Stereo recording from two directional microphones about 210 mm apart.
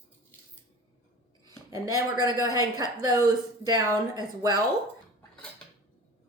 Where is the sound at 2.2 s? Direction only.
15° right (ahead or behind).